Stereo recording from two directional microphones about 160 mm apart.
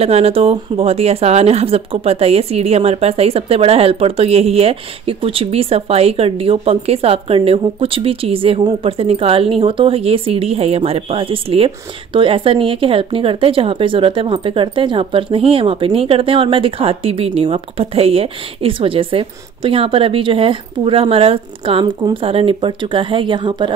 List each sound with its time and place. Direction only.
0.0 s speech: 40° right (ahead or behind)